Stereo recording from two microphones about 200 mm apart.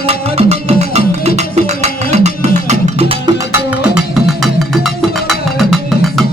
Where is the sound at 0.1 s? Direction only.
30° right (ahead or behind).